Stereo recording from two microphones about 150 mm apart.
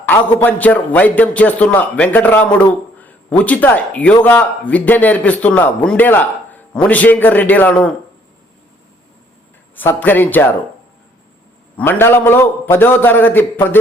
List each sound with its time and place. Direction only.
0.1 s a man's voice: 10° left (ahead or behind)
9.7 s speech: 15° left (ahead or behind)
11.8 s speech: 15° left (ahead or behind)